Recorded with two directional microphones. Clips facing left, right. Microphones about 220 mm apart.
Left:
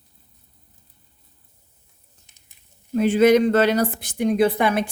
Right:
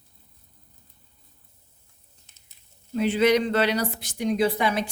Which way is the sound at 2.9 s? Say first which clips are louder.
Left 5 dB; 45° left (ahead or behind).